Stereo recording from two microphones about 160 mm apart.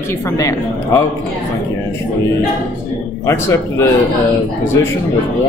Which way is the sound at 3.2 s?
15° left (ahead or behind).